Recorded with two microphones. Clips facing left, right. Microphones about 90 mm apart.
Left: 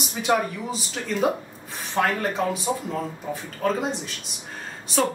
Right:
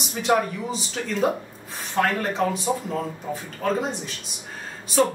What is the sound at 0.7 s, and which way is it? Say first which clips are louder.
Speech: right 1 dB; centre (ahead or behind).